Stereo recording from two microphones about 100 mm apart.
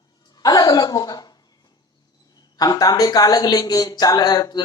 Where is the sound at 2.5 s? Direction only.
40° left (ahead or behind).